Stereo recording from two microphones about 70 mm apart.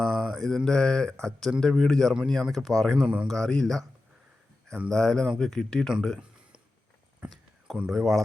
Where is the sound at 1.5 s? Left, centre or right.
Centre.